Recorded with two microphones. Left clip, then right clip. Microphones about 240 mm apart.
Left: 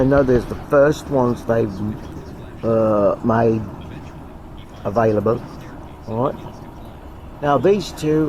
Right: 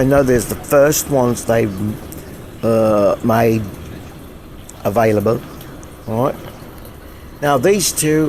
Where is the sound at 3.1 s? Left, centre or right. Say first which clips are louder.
Right 3 dB; right.